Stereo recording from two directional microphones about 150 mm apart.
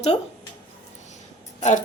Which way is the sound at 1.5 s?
50° left (ahead or behind).